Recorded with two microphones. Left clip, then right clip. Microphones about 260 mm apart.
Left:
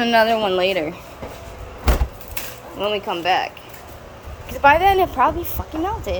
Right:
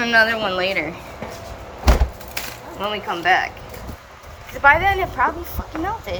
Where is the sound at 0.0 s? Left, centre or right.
Left.